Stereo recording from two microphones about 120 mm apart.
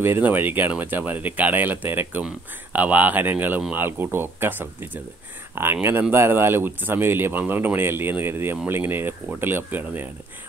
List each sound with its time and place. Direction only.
0.0 s speech: 20° right (ahead or behind)